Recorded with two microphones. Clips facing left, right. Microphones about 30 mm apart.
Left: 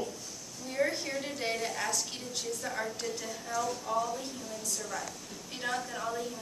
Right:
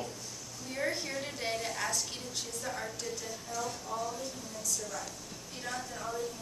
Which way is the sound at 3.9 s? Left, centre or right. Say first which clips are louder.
Left 7 dB; left.